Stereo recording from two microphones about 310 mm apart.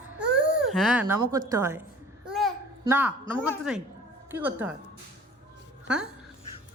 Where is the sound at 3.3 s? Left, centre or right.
Centre.